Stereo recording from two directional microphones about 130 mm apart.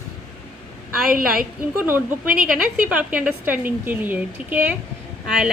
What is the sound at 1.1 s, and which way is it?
Speech, 90° right.